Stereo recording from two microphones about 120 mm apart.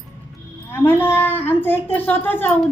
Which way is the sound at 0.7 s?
20° left (ahead or behind).